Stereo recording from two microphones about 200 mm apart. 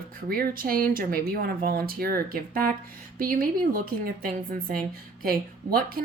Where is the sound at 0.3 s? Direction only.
50° right (ahead or behind).